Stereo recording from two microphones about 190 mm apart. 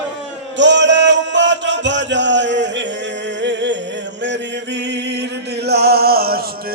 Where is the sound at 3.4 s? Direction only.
70° right (ahead or behind).